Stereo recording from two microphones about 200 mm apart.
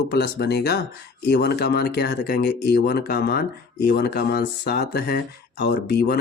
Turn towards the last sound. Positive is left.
turn(degrees=55)  # may be behind; listen again after turning